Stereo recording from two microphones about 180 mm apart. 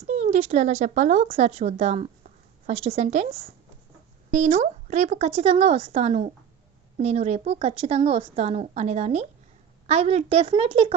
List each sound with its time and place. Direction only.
0.1 s a woman's voice: 40° right (ahead or behind)